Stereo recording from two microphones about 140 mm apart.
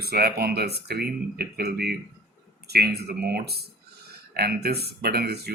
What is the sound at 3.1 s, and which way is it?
Speech, 90° right.